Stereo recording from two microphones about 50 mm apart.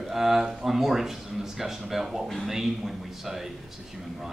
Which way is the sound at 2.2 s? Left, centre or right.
Centre.